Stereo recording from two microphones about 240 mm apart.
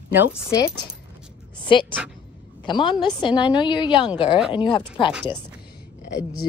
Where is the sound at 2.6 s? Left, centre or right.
Centre.